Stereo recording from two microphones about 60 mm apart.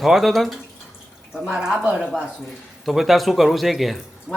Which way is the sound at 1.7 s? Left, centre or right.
Centre.